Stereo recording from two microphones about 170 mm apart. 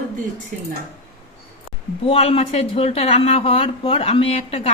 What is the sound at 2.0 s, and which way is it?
Speech, 35° left (ahead or behind).